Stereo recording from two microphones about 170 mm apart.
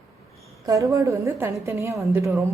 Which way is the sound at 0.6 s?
20° right (ahead or behind).